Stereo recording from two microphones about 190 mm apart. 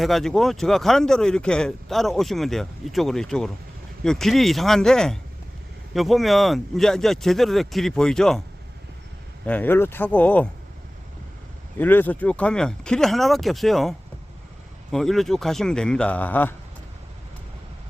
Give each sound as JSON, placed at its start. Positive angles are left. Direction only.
{"t": 0.0, "sound": "speech", "side_deg": 0}
{"t": 9.5, "sound": "speech", "side_deg": 10}
{"t": 11.8, "sound": "speech", "side_deg": 10}
{"t": 14.9, "sound": "speech", "side_deg": 0}